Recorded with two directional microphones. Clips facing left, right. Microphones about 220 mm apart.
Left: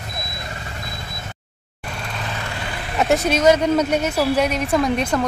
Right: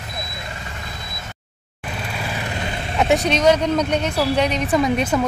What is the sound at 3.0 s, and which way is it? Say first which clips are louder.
Speech: even; centre (ahead or behind).